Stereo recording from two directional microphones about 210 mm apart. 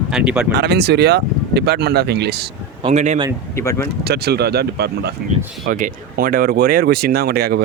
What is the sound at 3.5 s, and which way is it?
Speech, 15° left (ahead or behind).